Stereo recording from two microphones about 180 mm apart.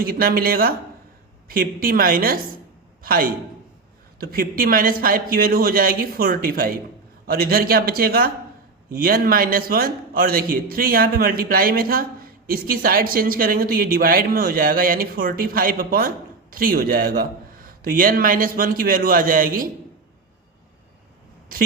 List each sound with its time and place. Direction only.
0.0 s a man's voice: 55° right (ahead or behind)